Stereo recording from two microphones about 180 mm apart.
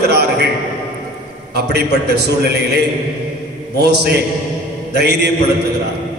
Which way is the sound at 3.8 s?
65° right (ahead or behind).